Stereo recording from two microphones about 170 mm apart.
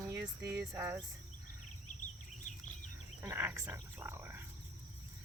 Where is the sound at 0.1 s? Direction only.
15° right (ahead or behind).